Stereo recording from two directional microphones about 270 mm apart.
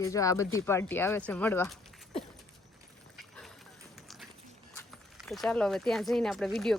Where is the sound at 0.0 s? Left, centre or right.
Centre.